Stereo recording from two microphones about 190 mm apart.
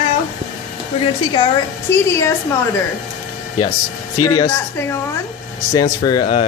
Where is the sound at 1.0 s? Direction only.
25° left (ahead or behind).